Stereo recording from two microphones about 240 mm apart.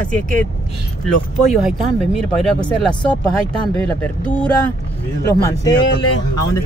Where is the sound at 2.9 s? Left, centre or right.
Centre.